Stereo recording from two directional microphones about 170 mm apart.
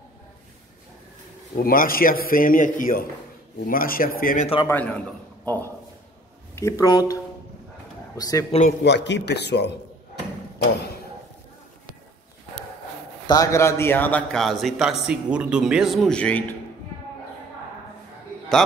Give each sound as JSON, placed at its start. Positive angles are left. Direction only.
{"t": 1.6, "sound": "speech", "side_deg": 60}
{"t": 4.6, "sound": "a man's voice", "side_deg": 10}
{"t": 8.2, "sound": "speech", "side_deg": 20}
{"t": 8.8, "sound": "speech", "side_deg": 90}
{"t": 13.3, "sound": "a man's voice", "side_deg": 20}